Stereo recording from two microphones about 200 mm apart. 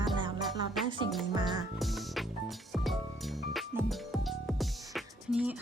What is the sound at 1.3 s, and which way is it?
Music, 20° right (ahead or behind).